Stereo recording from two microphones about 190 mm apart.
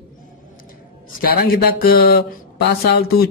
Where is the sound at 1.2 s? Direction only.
50° left (ahead or behind).